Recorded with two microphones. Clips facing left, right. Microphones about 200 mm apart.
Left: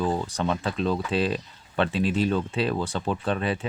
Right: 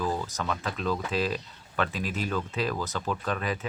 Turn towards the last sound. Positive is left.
turn(degrees=30)  # may be behind; listen again after turning